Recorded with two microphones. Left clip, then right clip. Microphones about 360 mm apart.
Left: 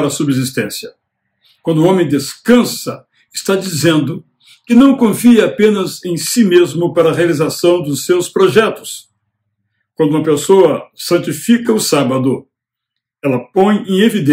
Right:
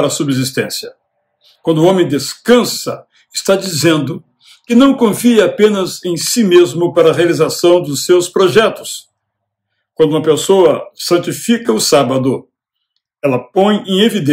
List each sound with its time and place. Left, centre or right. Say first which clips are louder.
0.0 s speech: right 1 dB; centre
13.2 s speech: right 1 dB; centre